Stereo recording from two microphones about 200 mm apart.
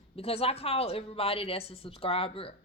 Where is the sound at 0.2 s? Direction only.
30° left (ahead or behind).